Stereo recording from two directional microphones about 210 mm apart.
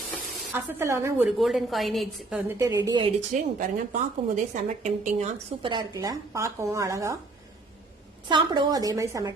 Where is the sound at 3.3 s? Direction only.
35° right (ahead or behind).